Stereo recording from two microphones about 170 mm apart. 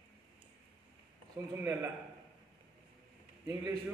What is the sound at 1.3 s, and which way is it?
Speech, 15° right (ahead or behind).